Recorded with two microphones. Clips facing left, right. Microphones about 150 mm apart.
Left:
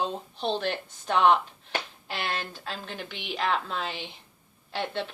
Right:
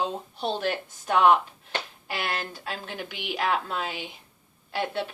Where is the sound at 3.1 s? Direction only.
10° right (ahead or behind).